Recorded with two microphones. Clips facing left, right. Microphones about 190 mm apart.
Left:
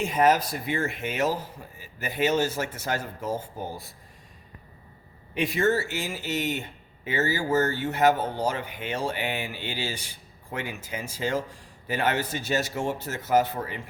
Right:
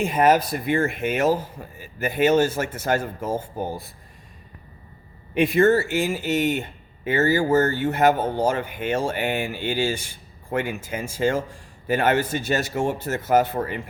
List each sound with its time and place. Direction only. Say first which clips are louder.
0.0 s speech: right 3 dB; 55° right (ahead or behind)
5.3 s speech: right 7 dB; 55° right (ahead or behind)